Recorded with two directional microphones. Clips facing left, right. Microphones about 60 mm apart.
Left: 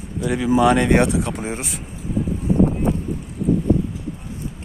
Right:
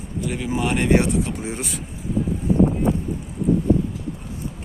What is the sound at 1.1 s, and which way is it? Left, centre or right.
Speech, left.